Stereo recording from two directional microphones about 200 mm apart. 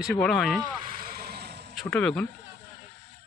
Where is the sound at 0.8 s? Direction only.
45° right (ahead or behind).